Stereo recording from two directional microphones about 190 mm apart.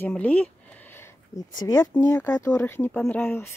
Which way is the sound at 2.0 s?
20° left (ahead or behind).